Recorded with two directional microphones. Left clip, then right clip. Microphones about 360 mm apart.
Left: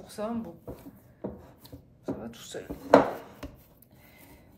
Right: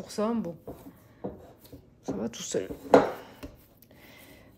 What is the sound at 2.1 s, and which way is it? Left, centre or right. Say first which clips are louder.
Speech: right 4 dB; centre.